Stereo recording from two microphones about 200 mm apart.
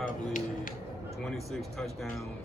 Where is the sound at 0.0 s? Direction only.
40° left (ahead or behind).